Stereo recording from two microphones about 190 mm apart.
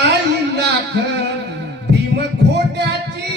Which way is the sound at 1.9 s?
60° right (ahead or behind).